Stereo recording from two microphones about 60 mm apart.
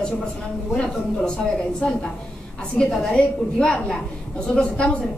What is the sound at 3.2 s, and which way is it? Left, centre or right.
A woman's voice, centre.